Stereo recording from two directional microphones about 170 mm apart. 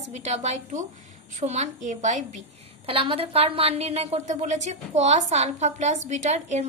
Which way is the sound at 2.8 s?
30° right (ahead or behind).